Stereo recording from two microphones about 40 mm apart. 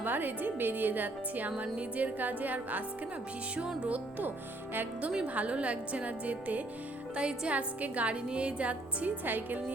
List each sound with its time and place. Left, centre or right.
0.0 s speech: right
1.5 s a woman's voice: right
2.1 s a woman's voice: right
7.2 s music: right
7.5 s a woman's voice: right
9.2 s a woman's voice: right